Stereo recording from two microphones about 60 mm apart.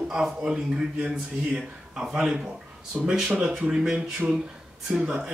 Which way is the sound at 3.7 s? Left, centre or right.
Centre.